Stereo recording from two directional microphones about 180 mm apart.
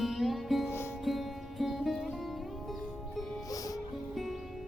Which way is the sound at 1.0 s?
Centre (ahead or behind).